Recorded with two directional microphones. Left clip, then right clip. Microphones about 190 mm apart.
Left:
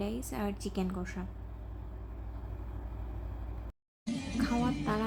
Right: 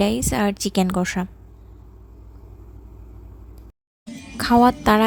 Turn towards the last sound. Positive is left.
turn(degrees=-55)  # may be behind; listen again after turning